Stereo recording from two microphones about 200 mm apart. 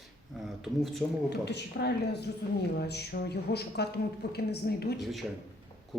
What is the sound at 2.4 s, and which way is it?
Speech, 55° left (ahead or behind).